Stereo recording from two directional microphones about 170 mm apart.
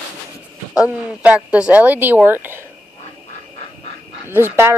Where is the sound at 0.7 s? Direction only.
10° right (ahead or behind).